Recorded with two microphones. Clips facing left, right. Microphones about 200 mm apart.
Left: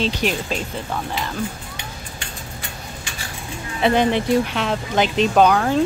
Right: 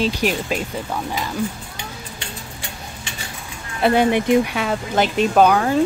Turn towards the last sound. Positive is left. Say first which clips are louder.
# right 1 dB
turn(degrees=-5)  # may be behind; listen again after turning